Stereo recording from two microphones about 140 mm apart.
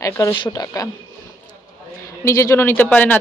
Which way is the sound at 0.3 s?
30° left (ahead or behind).